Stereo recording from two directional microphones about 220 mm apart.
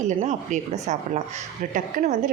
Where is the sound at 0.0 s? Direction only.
35° right (ahead or behind).